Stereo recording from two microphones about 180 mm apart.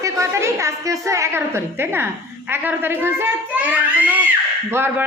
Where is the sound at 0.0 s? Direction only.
15° right (ahead or behind).